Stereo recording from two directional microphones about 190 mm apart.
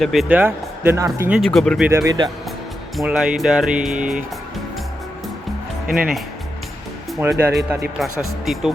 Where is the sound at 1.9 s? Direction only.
20° right (ahead or behind).